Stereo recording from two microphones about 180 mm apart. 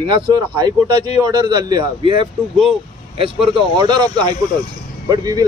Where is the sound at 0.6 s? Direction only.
25° right (ahead or behind).